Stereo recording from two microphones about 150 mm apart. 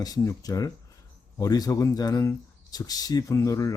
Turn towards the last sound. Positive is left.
turn(degrees=25)  # may be behind; listen again after turning